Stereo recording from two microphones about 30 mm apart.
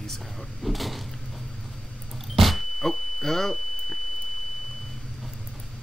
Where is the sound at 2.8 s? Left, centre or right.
Centre.